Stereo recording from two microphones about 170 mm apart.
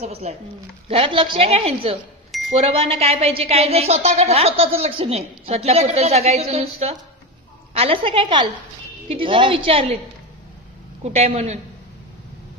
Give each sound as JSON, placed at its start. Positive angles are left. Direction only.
{"t": 0.0, "sound": "a woman's voice", "side_deg": -40}
{"t": 11.0, "sound": "a woman's voice", "side_deg": -40}